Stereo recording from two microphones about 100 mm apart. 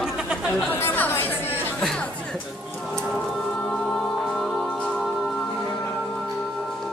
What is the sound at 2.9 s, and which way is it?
Music, 10° left (ahead or behind).